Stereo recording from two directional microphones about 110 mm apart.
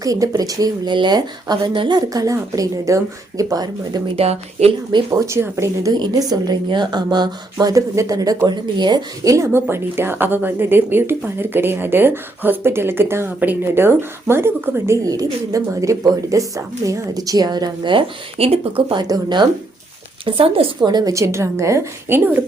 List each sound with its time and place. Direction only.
0.0 s a woman's voice: 30° right (ahead or behind)
2.0 s a woman's voice: 30° right (ahead or behind)
4.2 s speech: 70° right (ahead or behind)
5.1 s speech: 25° right (ahead or behind)
5.9 s a woman's voice: 35° right (ahead or behind)
9.3 s speech: 25° right (ahead or behind); by 18.9 s 60° right (ahead or behind)
18.9 s speech: 40° right (ahead or behind)
20.2 s speech: 55° right (ahead or behind)
20.8 s speech: 35° right (ahead or behind); by 22.4 s 20° right (ahead or behind)